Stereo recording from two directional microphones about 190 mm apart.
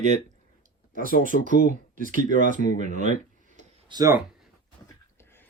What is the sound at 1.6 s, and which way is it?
Speech, 45° right (ahead or behind).